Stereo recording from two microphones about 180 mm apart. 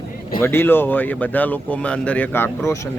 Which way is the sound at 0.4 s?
10° left (ahead or behind).